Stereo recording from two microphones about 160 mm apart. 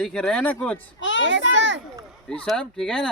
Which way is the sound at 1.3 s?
90° right.